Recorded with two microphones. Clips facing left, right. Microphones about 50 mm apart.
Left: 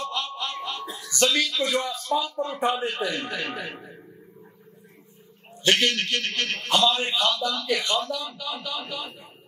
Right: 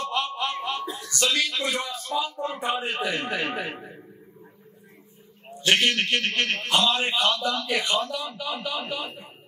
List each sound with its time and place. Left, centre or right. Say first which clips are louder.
0.1 s a sound: right 3 dB; right
1.4 s a man's voice: left 2 dB; centre
5.7 s a man's voice: right 1 dB; centre